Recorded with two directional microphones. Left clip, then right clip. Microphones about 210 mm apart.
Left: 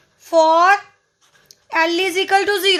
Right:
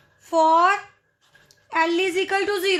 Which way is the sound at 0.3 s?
45° left (ahead or behind).